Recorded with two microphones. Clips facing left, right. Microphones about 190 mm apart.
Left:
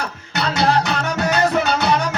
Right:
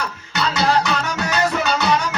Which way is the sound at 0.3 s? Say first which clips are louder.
Left 1 dB; 60° left (ahead or behind).